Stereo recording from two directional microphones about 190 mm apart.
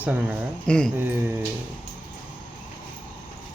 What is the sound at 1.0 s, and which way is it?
Speech, 10° right (ahead or behind).